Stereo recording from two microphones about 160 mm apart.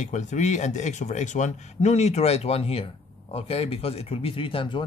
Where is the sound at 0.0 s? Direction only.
50° left (ahead or behind).